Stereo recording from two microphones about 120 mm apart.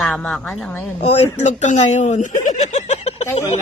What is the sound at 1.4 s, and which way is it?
Speech, 80° left.